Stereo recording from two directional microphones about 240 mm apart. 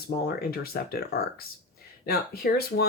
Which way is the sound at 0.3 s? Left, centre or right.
Left.